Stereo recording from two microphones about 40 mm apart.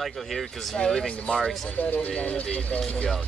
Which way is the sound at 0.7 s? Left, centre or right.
Centre.